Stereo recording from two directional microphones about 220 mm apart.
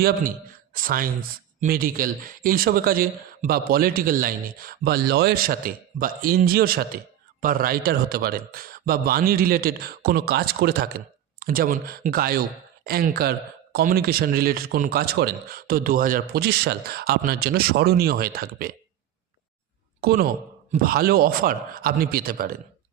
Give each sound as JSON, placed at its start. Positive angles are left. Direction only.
{"t": 0.0, "sound": "a man's voice", "side_deg": -40}
{"t": 20.0, "sound": "a man's voice", "side_deg": -45}